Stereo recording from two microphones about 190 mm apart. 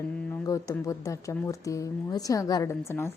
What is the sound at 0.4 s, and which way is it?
Speech, 15° left (ahead or behind).